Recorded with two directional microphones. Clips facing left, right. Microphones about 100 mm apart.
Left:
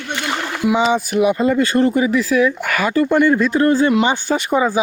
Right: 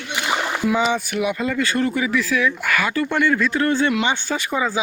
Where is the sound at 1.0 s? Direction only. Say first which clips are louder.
Left 7 dB; 35° left (ahead or behind).